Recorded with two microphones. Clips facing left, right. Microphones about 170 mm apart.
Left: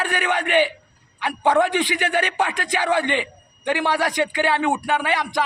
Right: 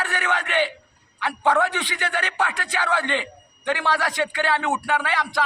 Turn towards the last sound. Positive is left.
turn(degrees=20)  # may be behind; listen again after turning